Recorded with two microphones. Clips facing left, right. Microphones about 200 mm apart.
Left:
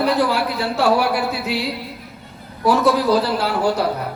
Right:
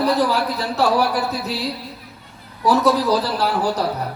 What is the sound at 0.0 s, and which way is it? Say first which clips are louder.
Speech: even; 35° right (ahead or behind).